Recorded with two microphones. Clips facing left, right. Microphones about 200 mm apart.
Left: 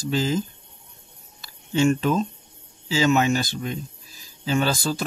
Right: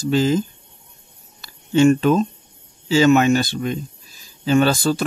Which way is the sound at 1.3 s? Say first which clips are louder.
Right 6 dB; 65° right (ahead or behind).